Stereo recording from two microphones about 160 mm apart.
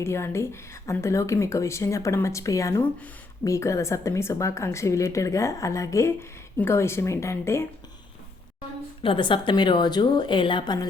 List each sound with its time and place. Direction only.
0.0 s a woman's voice: 15° left (ahead or behind)
9.0 s a woman's voice: 30° left (ahead or behind)